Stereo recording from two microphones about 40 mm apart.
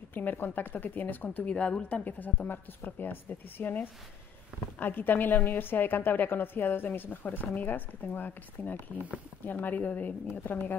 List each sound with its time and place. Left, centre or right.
0.1 s a woman's voice: left
1.6 s a woman's voice: left
1.9 s a woman's voice: left